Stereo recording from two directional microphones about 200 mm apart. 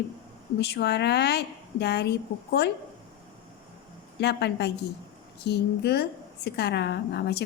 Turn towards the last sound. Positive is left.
turn(degrees=55)  # may be behind; listen again after turning